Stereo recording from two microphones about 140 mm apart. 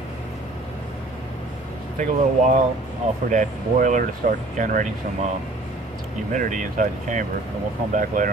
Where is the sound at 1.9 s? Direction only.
60° right (ahead or behind).